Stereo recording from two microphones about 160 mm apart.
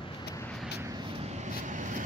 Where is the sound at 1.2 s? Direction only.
45° right (ahead or behind).